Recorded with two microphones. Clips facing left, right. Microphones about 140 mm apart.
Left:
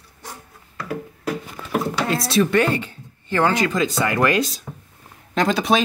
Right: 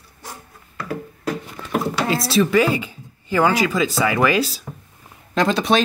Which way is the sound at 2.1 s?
Centre (ahead or behind).